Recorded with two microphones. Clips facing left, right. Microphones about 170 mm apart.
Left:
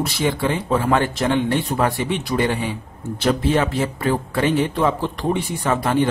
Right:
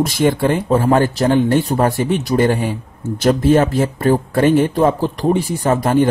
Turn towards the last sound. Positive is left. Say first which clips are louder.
# right 5 dB
turn(degrees=-45)  # may be behind; listen again after turning